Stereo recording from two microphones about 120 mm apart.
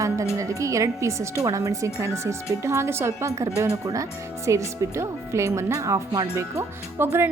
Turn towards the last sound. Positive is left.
turn(degrees=-20)  # may be behind; listen again after turning